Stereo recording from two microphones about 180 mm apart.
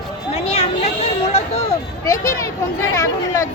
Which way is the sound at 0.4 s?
35° left (ahead or behind).